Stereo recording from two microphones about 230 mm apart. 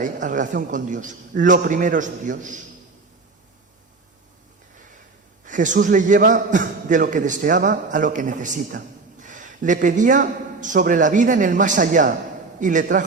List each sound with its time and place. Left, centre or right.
0.0 s a man's voice: right
5.5 s a man's voice: right